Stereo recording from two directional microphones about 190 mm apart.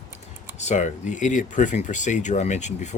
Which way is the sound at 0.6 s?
40° left (ahead or behind).